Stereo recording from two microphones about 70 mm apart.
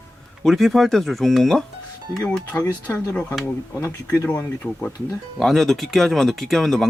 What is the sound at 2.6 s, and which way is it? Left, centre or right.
Speech, left.